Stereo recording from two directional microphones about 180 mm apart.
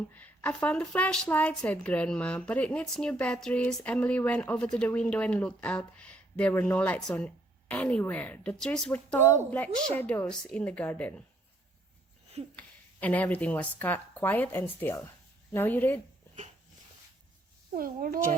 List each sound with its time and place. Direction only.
0.1 s speech: 10° left (ahead or behind)
12.5 s speech: 10° left (ahead or behind)
17.7 s speech: 50° right (ahead or behind)